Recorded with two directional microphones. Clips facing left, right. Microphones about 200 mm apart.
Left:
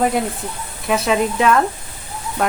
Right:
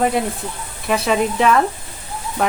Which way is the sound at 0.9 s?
Centre (ahead or behind).